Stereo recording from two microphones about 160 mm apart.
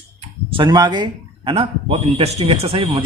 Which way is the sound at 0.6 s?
25° right (ahead or behind).